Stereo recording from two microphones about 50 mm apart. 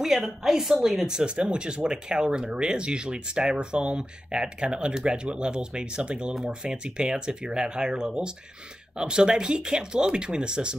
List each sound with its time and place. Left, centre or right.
0.0 s speech: centre